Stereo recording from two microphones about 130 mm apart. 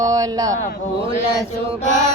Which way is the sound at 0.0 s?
25° right (ahead or behind).